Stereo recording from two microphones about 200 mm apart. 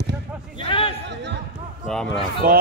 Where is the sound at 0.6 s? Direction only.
25° left (ahead or behind).